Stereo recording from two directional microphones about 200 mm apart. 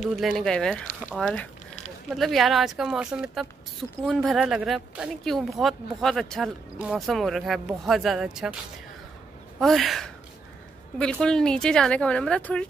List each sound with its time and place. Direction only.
0.2 s speech: centre (ahead or behind)
9.6 s speech: centre (ahead or behind)